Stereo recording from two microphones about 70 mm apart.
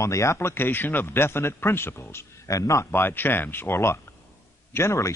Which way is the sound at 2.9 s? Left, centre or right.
Left.